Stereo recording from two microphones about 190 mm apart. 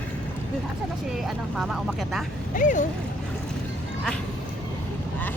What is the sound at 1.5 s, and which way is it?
Vehicle, centre (ahead or behind).